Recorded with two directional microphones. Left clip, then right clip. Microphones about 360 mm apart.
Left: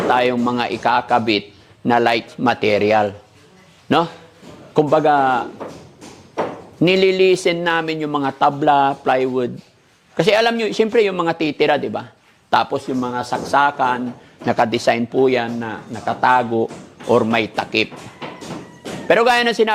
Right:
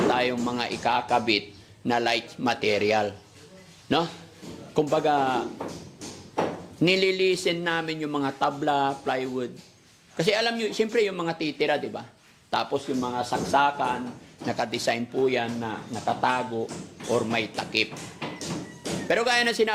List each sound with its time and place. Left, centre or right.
0.1 s a man's voice: left
4.7 s a man's voice: centre
6.8 s a man's voice: centre
19.0 s a man's voice: left